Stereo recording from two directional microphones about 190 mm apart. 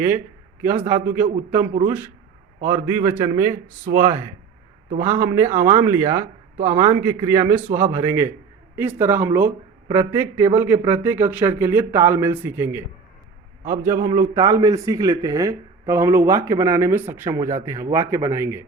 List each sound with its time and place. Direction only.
0.6 s a man's voice: 10° right (ahead or behind)